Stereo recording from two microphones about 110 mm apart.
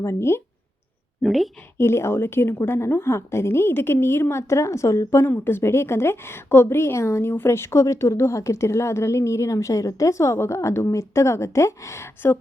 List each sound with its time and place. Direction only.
0.0 s a woman's voice: 25° left (ahead or behind)
1.2 s a woman's voice: centre (ahead or behind)
1.8 s a woman's voice: 20° left (ahead or behind)